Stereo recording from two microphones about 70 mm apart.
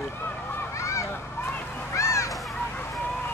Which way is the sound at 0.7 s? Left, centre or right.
Left.